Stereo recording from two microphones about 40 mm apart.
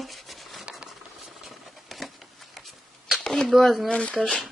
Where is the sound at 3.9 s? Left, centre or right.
Left.